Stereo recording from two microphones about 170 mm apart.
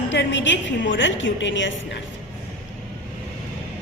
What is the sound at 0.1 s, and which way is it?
A woman's voice, 90° left.